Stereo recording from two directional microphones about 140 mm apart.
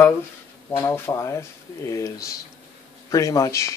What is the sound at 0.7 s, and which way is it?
Speech, 15° left (ahead or behind).